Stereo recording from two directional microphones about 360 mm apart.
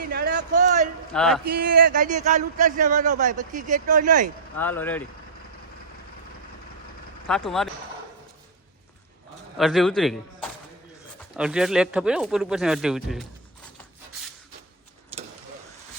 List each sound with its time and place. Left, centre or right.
0.0 s a sound: right
1.1 s speech: centre
1.5 s speech: right
4.5 s speech: centre
7.3 s speech: centre
9.6 s a man's voice: centre